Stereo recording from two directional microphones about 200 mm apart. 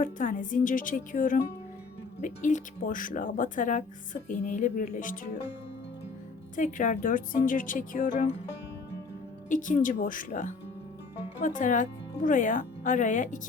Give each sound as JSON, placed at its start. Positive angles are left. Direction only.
{"t": 0.0, "sound": "speech", "side_deg": 40}
{"t": 6.6, "sound": "speech", "side_deg": 40}
{"t": 9.5, "sound": "speech", "side_deg": 40}